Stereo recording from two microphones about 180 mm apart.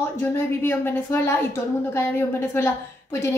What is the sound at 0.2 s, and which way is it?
A woman's voice, 10° left (ahead or behind).